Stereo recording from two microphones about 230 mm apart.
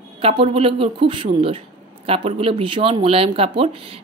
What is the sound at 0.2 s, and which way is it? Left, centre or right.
Speech, right.